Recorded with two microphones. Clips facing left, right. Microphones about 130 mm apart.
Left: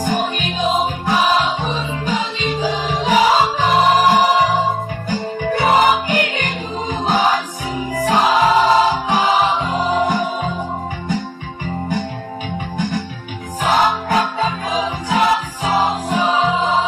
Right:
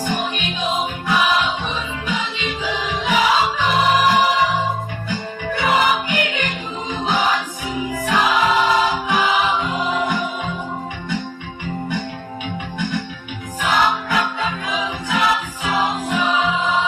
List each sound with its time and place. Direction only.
0.0 s music: 40° left (ahead or behind)
12.7 s music: 40° left (ahead or behind)